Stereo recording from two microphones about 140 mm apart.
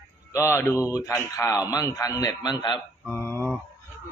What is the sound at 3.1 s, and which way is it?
Mantra, 15° left (ahead or behind).